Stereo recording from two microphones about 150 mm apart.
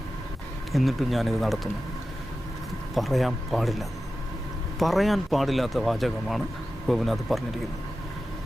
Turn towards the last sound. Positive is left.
turn(degrees=0)  # may be behind; listen again after turning